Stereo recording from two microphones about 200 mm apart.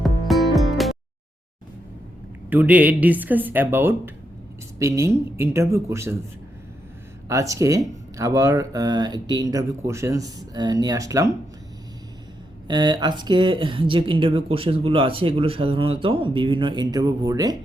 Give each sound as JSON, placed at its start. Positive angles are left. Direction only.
{"t": 0.0, "sound": "music", "side_deg": 0}
{"t": 2.5, "sound": "speech", "side_deg": -10}
{"t": 7.3, "sound": "speech", "side_deg": -15}
{"t": 12.6, "sound": "speech", "side_deg": -20}